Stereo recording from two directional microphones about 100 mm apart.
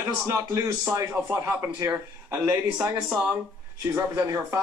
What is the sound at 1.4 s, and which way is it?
Speech, 30° right (ahead or behind).